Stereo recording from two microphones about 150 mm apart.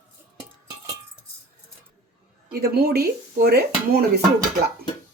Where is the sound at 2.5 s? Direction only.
90° right.